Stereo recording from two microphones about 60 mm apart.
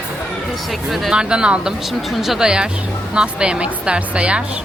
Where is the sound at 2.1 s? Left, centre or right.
Centre.